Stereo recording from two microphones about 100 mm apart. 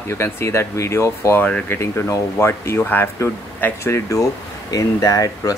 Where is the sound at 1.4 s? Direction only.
15° left (ahead or behind).